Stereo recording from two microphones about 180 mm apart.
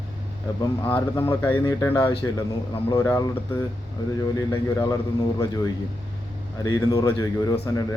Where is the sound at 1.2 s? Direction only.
10° left (ahead or behind).